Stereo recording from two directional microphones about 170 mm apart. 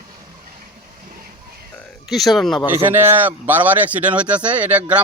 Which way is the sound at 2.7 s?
15° right (ahead or behind).